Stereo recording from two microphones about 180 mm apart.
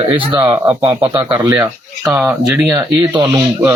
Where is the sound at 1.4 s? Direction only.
15° right (ahead or behind).